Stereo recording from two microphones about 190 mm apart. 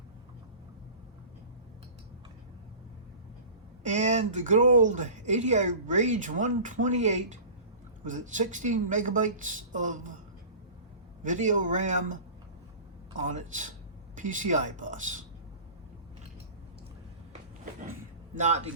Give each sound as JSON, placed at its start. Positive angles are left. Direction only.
{"t": 3.8, "sound": "speech", "side_deg": -40}
{"t": 11.2, "sound": "speech", "side_deg": -40}
{"t": 13.2, "sound": "speech", "side_deg": -40}
{"t": 18.3, "sound": "speech", "side_deg": -35}